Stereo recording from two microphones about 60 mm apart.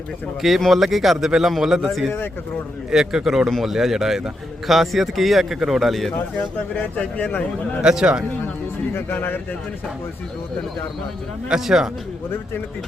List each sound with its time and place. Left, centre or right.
0.4 s a man's voice: centre
2.9 s a man's voice: centre
7.0 s a man's voice: left
7.8 s speech: centre
9.0 s speech: left
11.4 s speech: centre